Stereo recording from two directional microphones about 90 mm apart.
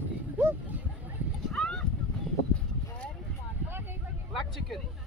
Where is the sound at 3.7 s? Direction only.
25° right (ahead or behind).